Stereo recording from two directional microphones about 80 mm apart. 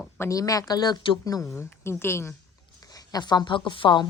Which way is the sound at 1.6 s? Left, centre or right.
Left.